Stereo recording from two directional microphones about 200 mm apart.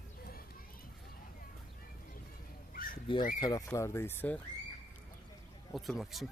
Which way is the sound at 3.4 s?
15° left (ahead or behind).